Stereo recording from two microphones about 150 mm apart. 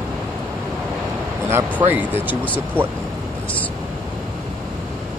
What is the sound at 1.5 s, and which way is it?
Speech, 15° right (ahead or behind).